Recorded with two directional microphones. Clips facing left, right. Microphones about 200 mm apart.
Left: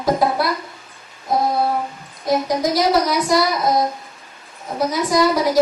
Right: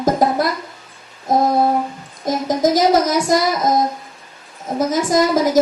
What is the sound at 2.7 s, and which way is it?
Speech, 45° right (ahead or behind).